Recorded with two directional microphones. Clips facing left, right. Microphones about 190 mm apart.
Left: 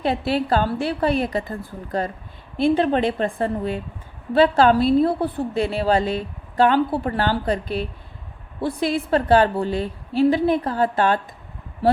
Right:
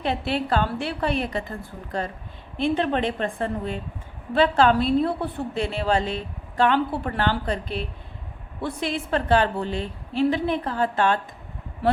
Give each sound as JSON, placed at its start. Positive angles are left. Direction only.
{"t": 0.0, "sound": "a woman's voice", "side_deg": 35}